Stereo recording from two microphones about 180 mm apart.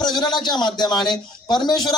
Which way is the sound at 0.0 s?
25° left (ahead or behind).